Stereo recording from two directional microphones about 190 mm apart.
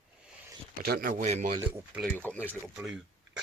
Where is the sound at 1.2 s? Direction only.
40° right (ahead or behind).